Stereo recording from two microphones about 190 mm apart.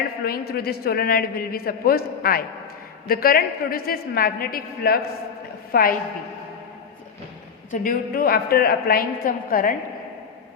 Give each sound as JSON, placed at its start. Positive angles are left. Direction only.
{"t": 0.3, "sound": "a man's voice", "side_deg": 55}
{"t": 7.7, "sound": "a man's voice", "side_deg": 50}